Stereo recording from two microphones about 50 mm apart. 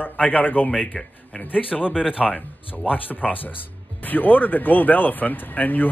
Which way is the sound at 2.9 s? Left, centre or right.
Left.